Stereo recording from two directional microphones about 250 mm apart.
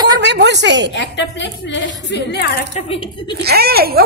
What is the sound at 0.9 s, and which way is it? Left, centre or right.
Speech, left.